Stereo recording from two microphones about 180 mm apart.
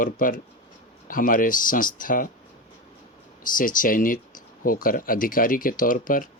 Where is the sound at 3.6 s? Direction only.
50° left (ahead or behind).